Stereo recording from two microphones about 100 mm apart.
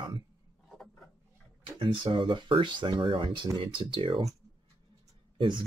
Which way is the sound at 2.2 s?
55° right (ahead or behind).